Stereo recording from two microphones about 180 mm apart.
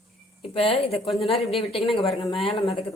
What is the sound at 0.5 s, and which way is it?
Speech, 30° left (ahead or behind).